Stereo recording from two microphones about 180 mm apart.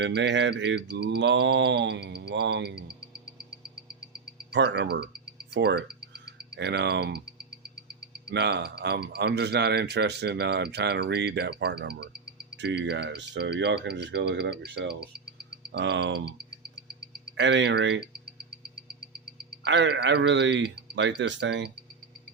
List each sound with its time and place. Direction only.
0.0 s speech: 80° right
4.5 s speech: 70° right (ahead or behind)
8.3 s speech: 70° right (ahead or behind)
12.5 s speech: 80° right
17.3 s a man's voice: 80° right
19.6 s a man's voice: 80° right